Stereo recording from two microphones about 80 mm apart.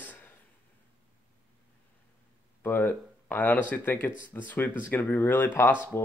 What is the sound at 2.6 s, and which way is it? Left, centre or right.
Speech, left.